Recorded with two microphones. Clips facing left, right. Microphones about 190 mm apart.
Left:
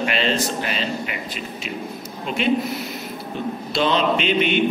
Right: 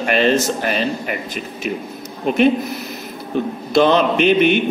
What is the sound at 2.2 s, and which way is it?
Mantra, 50° right (ahead or behind).